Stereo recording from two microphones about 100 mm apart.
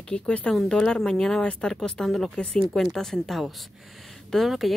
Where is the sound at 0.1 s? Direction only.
10° left (ahead or behind).